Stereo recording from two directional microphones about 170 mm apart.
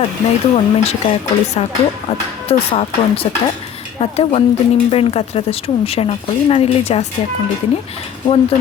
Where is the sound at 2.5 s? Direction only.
35° left (ahead or behind).